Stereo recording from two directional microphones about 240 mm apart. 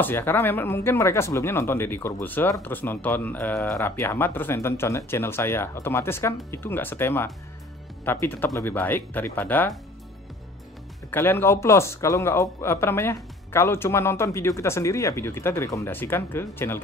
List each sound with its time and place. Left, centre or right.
0.0 s speech: centre
11.1 s speech: centre